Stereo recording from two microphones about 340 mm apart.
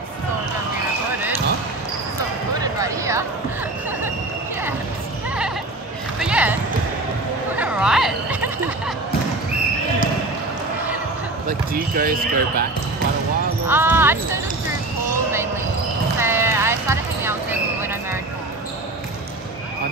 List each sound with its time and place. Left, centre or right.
2.6 s speech: centre
6.1 s a sound: centre
7.5 s music: centre
11.4 s speech: right
13.7 s speech: centre
16.2 s basketball bounce: centre